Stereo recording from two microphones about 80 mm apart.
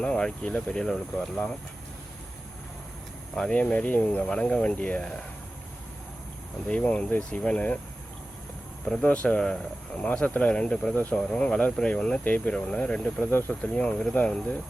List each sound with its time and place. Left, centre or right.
0.0 s speech: centre
3.3 s speech: centre
6.7 s speech: centre
8.9 s speech: centre